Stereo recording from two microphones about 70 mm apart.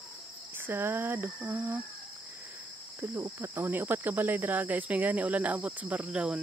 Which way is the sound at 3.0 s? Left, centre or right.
Right.